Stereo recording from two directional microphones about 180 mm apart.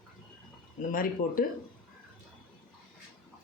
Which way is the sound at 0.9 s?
50° left (ahead or behind).